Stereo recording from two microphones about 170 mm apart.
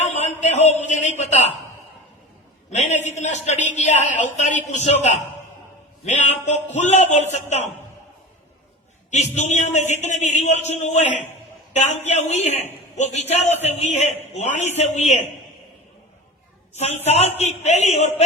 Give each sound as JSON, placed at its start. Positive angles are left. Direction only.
{"t": 0.0, "sound": "a sound", "side_deg": 40}
{"t": 2.6, "sound": "a man's voice", "side_deg": 40}
{"t": 6.1, "sound": "a man's voice", "side_deg": 45}
{"t": 9.3, "sound": "a man's voice", "side_deg": 40}
{"t": 16.7, "sound": "a man's voice", "side_deg": 40}